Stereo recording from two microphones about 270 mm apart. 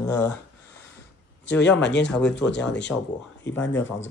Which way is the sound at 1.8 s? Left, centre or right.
Left.